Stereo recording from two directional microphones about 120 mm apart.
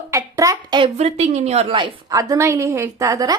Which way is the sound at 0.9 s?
65° right (ahead or behind).